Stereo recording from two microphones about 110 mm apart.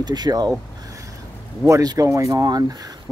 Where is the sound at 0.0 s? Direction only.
40° right (ahead or behind).